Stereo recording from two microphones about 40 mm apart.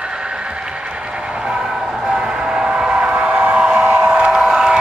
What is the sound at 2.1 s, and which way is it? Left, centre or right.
Train, right.